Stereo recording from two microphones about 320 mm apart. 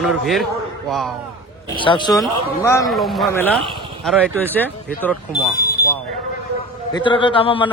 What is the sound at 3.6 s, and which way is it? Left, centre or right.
Speech, centre.